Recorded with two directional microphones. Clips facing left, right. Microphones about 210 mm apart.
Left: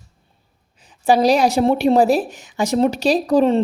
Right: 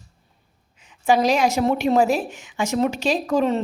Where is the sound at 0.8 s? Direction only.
35° left (ahead or behind).